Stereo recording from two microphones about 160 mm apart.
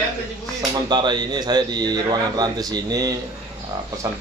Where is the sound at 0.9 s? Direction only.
30° right (ahead or behind).